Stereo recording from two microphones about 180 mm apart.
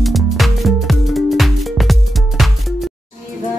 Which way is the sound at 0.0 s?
Centre (ahead or behind).